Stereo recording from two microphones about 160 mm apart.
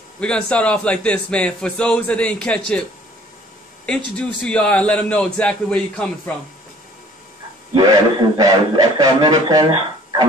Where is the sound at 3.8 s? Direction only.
5° left (ahead or behind).